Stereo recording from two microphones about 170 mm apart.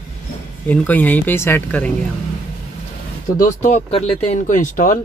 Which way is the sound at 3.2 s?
50° left (ahead or behind).